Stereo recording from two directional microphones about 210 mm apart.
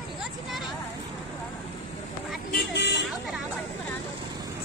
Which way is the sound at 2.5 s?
55° left (ahead or behind).